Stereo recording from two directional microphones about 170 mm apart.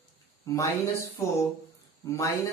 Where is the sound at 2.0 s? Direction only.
20° left (ahead or behind).